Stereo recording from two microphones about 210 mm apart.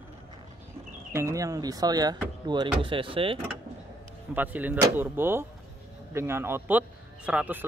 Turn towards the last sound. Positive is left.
turn(degrees=-5)  # may be behind; listen again after turning